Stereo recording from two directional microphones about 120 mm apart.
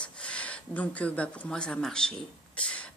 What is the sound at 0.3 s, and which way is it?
Speech, 10° left (ahead or behind).